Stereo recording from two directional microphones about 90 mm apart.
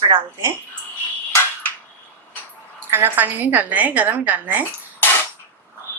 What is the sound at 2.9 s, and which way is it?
Speech, 20° right (ahead or behind).